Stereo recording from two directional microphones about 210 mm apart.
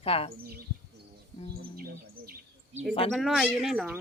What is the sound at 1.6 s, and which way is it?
Bird, 45° right (ahead or behind).